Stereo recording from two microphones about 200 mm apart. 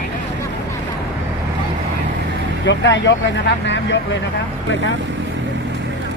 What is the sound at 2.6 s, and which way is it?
Speech, 65° left (ahead or behind).